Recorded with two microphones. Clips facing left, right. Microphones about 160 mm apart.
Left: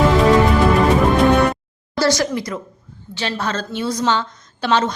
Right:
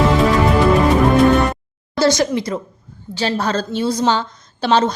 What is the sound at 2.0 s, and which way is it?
Speech, 20° right (ahead or behind).